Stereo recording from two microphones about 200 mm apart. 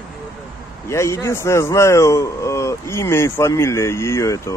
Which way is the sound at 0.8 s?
15° left (ahead or behind).